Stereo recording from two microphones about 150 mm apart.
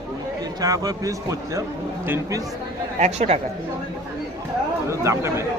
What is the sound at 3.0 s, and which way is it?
Speech, 50° right (ahead or behind).